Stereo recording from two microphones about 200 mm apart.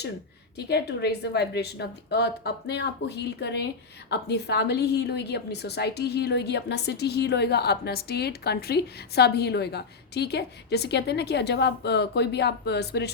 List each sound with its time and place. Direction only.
0.5 s a woman's voice: 55° left (ahead or behind)